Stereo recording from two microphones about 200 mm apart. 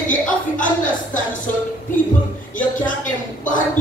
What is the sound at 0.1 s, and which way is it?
Speech, 40° left (ahead or behind).